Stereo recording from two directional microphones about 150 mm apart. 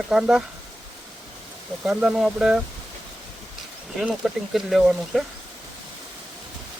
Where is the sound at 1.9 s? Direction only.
5° right (ahead or behind).